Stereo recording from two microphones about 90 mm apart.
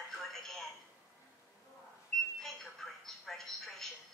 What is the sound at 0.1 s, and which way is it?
Television, 5° left (ahead or behind).